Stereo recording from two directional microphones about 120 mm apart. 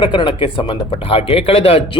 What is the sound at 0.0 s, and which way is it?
Speech, 40° left (ahead or behind).